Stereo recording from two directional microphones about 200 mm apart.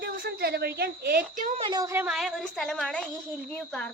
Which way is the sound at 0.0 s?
50° right (ahead or behind).